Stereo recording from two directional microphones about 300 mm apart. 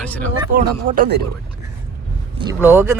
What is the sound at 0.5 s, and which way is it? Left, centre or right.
Speech, right.